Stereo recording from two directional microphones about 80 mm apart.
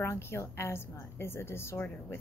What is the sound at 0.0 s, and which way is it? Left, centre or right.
A woman's voice, left.